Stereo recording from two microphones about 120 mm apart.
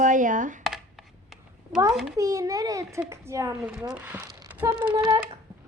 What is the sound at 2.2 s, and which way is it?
A woman's voice, 30° right (ahead or behind).